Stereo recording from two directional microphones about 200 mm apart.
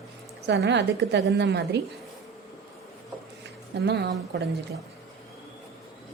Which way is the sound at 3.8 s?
55° right (ahead or behind).